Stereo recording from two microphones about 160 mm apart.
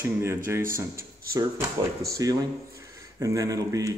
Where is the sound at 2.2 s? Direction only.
20° right (ahead or behind).